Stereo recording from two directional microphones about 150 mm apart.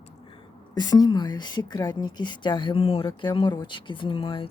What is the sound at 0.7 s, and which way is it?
Speech, 25° left (ahead or behind).